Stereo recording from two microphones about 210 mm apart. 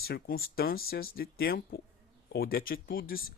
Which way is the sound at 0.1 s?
45° left (ahead or behind).